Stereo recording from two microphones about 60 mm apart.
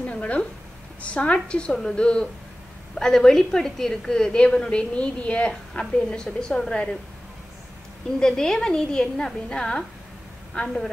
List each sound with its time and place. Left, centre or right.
0.0 s a sound: left
1.0 s a woman's voice: left
2.9 s a woman's voice: centre
8.2 s a woman's voice: centre